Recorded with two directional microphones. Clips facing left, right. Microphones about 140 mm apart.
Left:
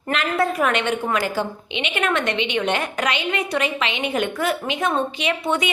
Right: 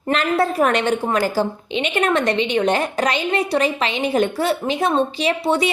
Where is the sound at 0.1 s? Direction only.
35° right (ahead or behind).